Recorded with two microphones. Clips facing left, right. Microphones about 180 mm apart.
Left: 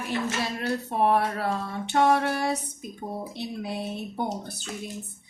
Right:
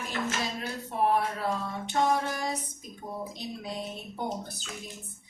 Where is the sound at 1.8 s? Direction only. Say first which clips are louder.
Left 5 dB; 65° left (ahead or behind).